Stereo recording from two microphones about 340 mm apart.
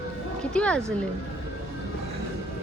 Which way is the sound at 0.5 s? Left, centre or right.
Centre.